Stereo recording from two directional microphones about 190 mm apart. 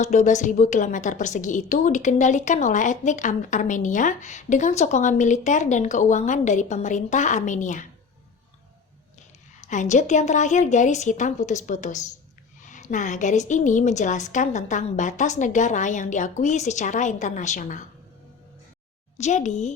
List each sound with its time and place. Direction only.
0.0 s a woman's voice: 35° left (ahead or behind)
9.6 s a woman's voice: 40° left (ahead or behind)
19.1 s a woman's voice: 40° left (ahead or behind)